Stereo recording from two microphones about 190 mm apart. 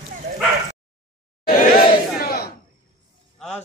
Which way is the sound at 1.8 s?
55° left (ahead or behind).